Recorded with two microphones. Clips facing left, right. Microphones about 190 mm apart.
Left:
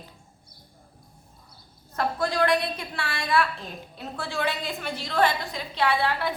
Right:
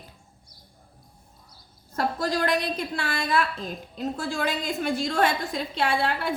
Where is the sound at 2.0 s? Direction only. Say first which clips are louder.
Left 1 dB; 40° right (ahead or behind).